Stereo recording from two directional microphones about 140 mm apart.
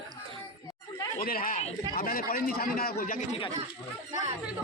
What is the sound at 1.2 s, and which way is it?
A man's voice, 90° left.